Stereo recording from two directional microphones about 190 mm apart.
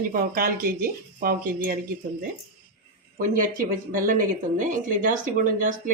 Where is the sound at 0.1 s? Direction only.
50° right (ahead or behind).